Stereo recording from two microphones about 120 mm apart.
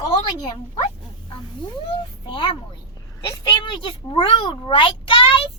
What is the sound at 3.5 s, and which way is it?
Speech, 45° left (ahead or behind).